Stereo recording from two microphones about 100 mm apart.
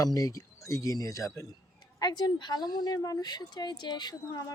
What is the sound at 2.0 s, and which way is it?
A woman's voice, 45° left (ahead or behind).